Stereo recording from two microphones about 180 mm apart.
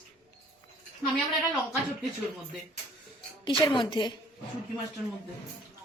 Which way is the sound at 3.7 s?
25° left (ahead or behind).